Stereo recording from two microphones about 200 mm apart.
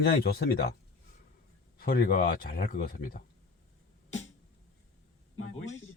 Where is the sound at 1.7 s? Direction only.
50° left (ahead or behind).